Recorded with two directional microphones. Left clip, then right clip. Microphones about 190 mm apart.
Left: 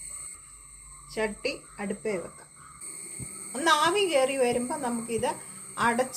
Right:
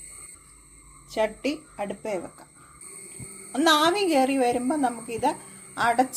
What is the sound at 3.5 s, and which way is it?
A woman's voice, 50° right (ahead or behind).